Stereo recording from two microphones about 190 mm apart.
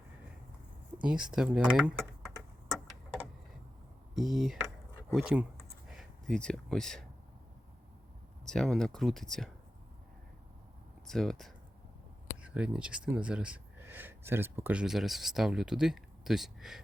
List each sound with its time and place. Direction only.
1.0 s a sound: 5° right (ahead or behind)
4.1 s speech: centre (ahead or behind)
8.4 s speech: centre (ahead or behind)
11.1 s speech: centre (ahead or behind)
12.5 s speech: 5° right (ahead or behind)